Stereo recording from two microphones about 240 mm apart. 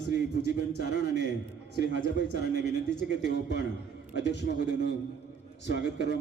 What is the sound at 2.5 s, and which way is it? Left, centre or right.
Speech, right.